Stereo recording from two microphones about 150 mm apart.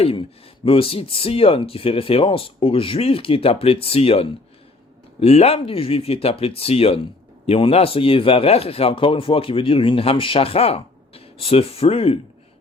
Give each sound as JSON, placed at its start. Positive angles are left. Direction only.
{"t": 0.0, "sound": "speech", "side_deg": 40}